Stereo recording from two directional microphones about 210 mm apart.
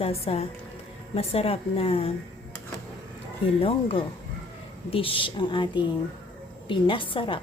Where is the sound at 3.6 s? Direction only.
25° left (ahead or behind).